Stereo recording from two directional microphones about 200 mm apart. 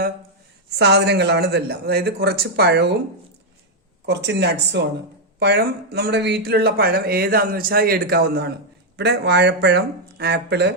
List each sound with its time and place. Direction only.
0.8 s a man's voice: 55° right (ahead or behind)
4.0 s a man's voice: 60° right (ahead or behind)